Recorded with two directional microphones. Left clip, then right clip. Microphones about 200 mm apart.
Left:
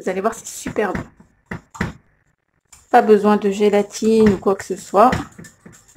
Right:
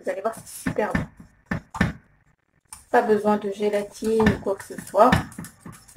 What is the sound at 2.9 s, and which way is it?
Speech, 60° left (ahead or behind).